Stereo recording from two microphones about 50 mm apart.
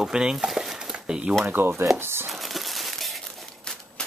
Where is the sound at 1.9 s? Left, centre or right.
Right.